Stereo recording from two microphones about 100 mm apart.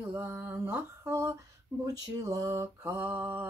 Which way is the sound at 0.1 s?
25° right (ahead or behind).